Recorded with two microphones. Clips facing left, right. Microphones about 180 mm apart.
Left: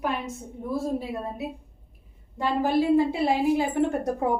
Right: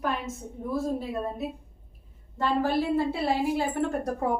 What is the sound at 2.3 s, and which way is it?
A woman's voice, 15° left (ahead or behind).